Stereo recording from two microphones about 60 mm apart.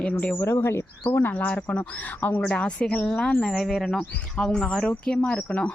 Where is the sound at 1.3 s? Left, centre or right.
Left.